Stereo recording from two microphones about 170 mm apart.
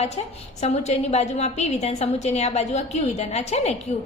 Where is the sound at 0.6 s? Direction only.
40° left (ahead or behind).